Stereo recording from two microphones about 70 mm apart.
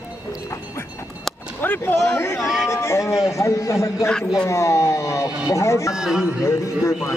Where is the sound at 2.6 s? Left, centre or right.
Left.